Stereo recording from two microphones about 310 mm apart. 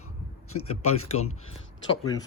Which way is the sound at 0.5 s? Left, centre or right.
Left.